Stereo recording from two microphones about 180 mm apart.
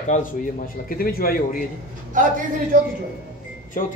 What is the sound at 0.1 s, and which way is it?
Speech, 45° left (ahead or behind).